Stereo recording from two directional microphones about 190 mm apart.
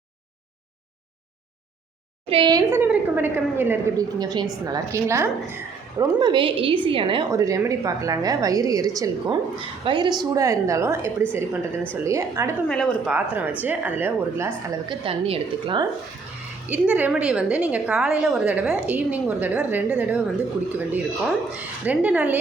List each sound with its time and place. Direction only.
2.2 s a woman's voice: 25° right (ahead or behind)
7.3 s a woman's voice: 15° right (ahead or behind)
12.6 s speech: 5° left (ahead or behind)
13.1 s a woman's voice: 10° right (ahead or behind)
14.8 s a woman's voice: 25° right (ahead or behind)
16.6 s a woman's voice: 10° right (ahead or behind)